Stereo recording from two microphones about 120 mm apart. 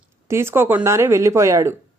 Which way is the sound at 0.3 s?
20° right (ahead or behind).